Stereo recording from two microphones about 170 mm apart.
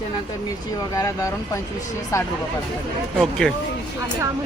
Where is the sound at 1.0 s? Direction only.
20° left (ahead or behind).